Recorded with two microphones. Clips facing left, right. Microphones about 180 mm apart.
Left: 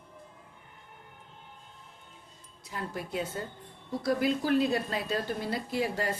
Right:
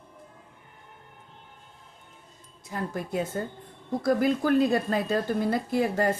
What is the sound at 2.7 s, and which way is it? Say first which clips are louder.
A woman's voice: right 5 dB; 45° right (ahead or behind).